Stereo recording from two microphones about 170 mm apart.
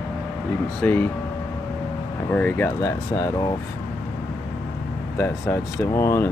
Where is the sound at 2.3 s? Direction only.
10° left (ahead or behind).